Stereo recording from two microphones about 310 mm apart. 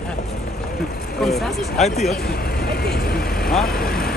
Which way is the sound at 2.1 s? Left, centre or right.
Left.